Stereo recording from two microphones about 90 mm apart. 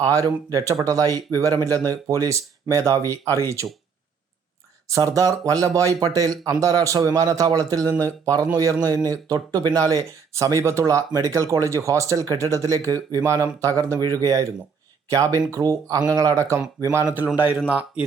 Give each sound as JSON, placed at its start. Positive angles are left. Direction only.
{"t": 0.0, "sound": "speech", "side_deg": -40}
{"t": 4.9, "sound": "speech", "side_deg": -35}
{"t": 17.7, "sound": "speech", "side_deg": -15}